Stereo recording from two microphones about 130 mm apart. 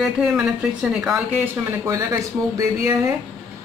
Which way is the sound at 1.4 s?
20° right (ahead or behind).